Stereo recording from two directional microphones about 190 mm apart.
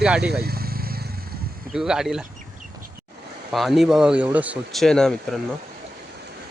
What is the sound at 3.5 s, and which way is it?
Speech, centre (ahead or behind).